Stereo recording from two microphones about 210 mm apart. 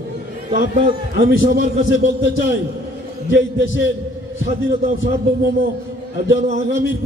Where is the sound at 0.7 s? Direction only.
40° right (ahead or behind).